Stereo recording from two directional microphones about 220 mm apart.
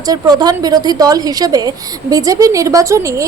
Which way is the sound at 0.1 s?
15° right (ahead or behind).